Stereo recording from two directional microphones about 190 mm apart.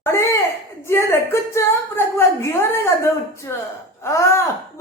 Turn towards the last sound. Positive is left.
turn(degrees=15)  # may be behind; listen again after turning